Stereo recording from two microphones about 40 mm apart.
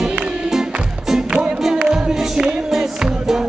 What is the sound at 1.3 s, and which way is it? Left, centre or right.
Music, right.